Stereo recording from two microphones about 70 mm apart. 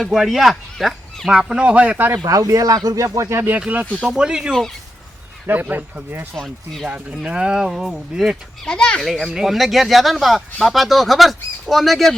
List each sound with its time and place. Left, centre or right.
0.1 s speech: centre; by 2.1 s right
2.1 s speech: right
4.0 s speech: centre
5.5 s speech: right
6.3 s speech: centre
6.8 s speech: centre
8.6 s speech: centre
9.0 s speech: centre